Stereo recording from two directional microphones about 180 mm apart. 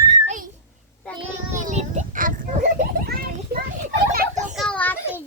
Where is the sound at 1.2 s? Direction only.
40° right (ahead or behind); by 3.7 s 60° right (ahead or behind).